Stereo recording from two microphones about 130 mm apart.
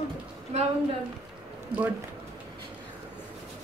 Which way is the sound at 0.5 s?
60° right (ahead or behind).